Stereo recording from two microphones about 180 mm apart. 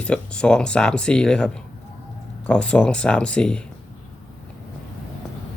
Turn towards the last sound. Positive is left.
turn(degrees=5)  # may be behind; listen again after turning